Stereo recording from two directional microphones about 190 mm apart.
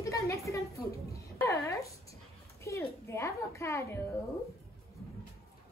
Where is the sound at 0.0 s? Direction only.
15° left (ahead or behind).